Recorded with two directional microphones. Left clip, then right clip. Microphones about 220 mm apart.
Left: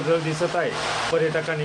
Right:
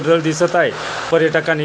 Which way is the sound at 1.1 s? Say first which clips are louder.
Right 11 dB; 30° right (ahead or behind).